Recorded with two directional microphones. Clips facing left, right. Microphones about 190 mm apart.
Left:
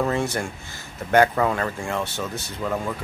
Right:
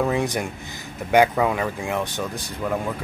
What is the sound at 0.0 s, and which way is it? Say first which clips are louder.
Speech: right 1 dB; 15° right (ahead or behind).